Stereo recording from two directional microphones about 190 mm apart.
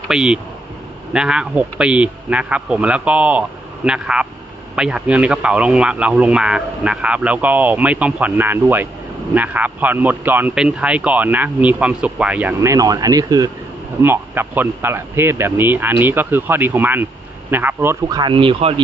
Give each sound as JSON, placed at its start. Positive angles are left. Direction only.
{"t": 0.1, "sound": "speech", "side_deg": -5}
{"t": 18.2, "sound": "speech", "side_deg": -25}